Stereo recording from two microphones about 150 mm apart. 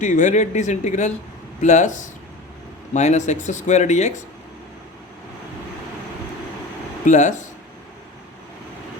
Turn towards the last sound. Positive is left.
turn(degrees=55)  # may be behind; listen again after turning